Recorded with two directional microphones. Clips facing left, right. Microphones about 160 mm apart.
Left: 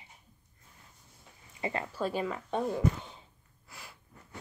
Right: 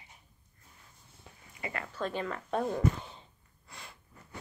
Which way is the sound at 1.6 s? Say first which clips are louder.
Left 5 dB; 25° left (ahead or behind).